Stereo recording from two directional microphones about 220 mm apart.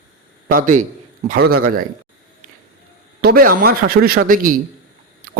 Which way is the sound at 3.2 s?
40° right (ahead or behind).